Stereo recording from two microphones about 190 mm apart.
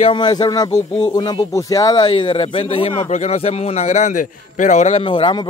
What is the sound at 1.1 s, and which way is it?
A man's voice, 20° left (ahead or behind).